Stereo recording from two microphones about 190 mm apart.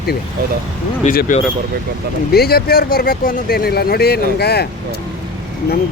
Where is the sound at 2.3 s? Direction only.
55° left (ahead or behind).